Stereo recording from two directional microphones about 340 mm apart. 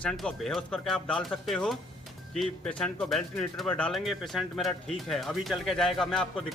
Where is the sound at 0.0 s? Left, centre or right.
Centre.